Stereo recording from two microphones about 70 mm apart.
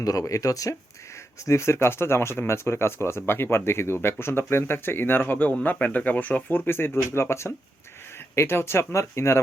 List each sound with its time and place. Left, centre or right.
0.0 s speech: left